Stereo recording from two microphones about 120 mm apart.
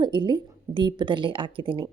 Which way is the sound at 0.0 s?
40° right (ahead or behind).